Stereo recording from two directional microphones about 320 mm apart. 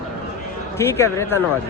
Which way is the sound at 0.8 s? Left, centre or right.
Centre.